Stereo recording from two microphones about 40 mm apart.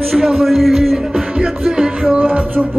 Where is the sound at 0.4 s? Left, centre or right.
Centre.